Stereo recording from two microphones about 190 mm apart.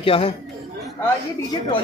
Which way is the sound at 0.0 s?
30° left (ahead or behind).